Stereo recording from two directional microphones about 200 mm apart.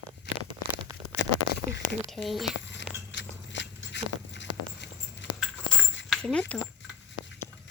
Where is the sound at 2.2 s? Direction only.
Centre (ahead or behind).